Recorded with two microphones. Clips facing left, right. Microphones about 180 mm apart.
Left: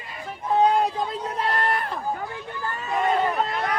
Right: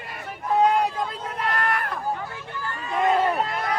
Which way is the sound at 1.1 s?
30° left (ahead or behind).